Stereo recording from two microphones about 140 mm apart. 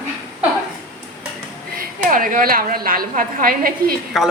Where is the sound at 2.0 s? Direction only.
75° right (ahead or behind).